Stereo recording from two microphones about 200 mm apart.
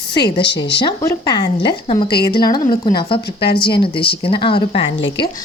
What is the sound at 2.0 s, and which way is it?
Speech, 55° left (ahead or behind).